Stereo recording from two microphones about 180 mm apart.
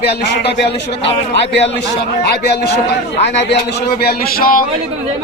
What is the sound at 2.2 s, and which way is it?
A man's voice, 65° left (ahead or behind).